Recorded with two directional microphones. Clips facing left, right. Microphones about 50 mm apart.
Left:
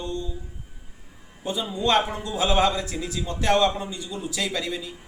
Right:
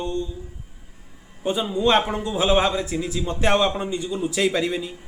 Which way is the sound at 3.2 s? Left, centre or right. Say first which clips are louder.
Right 1 dB; right.